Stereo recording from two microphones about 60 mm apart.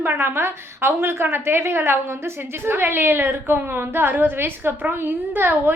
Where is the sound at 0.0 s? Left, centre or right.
Right.